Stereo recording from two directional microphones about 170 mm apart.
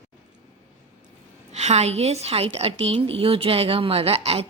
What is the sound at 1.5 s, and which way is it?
A woman's voice, 40° right (ahead or behind).